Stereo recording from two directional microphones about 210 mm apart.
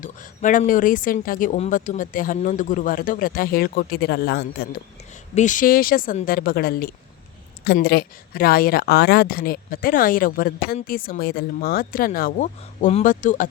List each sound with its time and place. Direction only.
0.0 s speech: 40° left (ahead or behind)
5.3 s speech: 35° left (ahead or behind)